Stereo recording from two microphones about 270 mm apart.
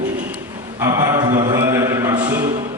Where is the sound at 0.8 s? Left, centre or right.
Centre.